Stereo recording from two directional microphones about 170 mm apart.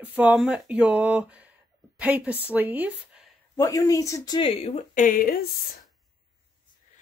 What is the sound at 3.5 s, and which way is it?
Speech, 20° left (ahead or behind).